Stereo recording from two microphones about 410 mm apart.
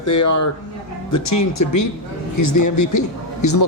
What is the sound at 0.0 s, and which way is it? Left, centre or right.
A man's voice, left.